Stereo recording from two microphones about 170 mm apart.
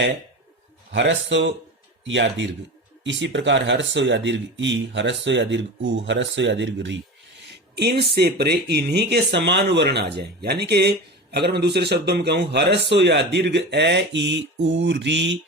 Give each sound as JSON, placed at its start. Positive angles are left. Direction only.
{"t": 0.9, "sound": "speech", "side_deg": -90}
{"t": 7.5, "sound": "speech", "side_deg": -75}